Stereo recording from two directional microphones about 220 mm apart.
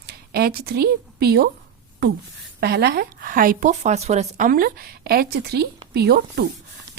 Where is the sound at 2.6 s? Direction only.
45° right (ahead or behind).